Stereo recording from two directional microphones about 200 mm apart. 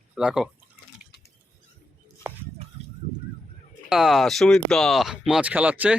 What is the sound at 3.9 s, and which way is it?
Speech, centre (ahead or behind).